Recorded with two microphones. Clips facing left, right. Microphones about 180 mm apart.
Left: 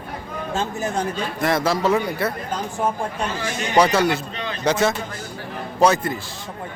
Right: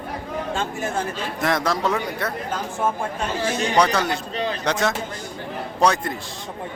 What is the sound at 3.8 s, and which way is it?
Speech, 5° left (ahead or behind).